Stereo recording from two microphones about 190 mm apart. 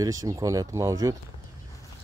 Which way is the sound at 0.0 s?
15° right (ahead or behind).